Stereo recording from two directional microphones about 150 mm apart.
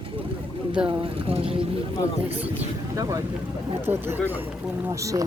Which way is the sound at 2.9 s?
20° right (ahead or behind).